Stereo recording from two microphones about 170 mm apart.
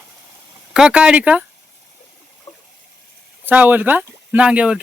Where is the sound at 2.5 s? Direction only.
35° left (ahead or behind).